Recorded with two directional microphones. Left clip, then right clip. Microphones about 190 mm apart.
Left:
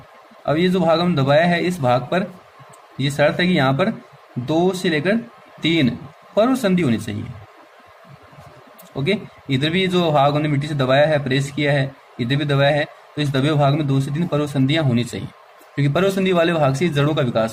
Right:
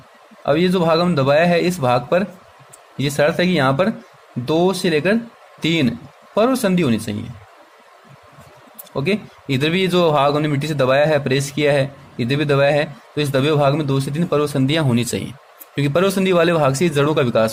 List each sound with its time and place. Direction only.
0.4 s a man's voice: 25° right (ahead or behind)
9.0 s a man's voice: 30° right (ahead or behind)